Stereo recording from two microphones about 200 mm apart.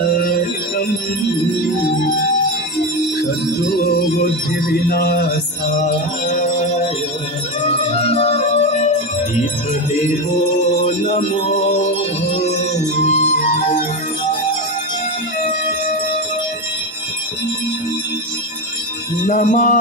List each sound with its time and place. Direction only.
0.0 s music: 45° left (ahead or behind)
3.2 s music: 50° left (ahead or behind)
5.7 s music: 35° left (ahead or behind)
10.8 s music: 35° left (ahead or behind)
19.2 s music: 40° left (ahead or behind)